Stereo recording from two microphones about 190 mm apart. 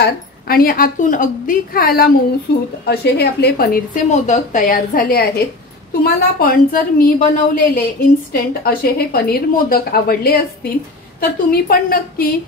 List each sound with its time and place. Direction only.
0.0 s a woman's voice: 50° left (ahead or behind)